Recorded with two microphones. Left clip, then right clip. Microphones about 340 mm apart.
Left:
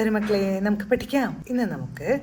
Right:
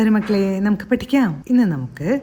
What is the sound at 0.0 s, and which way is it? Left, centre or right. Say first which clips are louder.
A woman's voice: right 4 dB; right.